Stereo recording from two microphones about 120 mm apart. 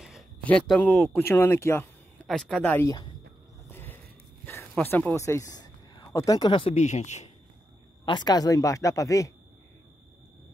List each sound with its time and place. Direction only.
0.4 s speech: 10° left (ahead or behind)
1.2 s speech: 20° left (ahead or behind)
2.2 s speech: centre (ahead or behind)
2.8 s speech: 30° left (ahead or behind)
3.6 s a sound: 20° left (ahead or behind)
4.8 s speech: 15° left (ahead or behind)
5.1 s speech: 25° left (ahead or behind)
6.5 s speech: 50° left (ahead or behind)
6.8 s a man's voice: 75° left (ahead or behind)
8.0 s speech: 40° left (ahead or behind)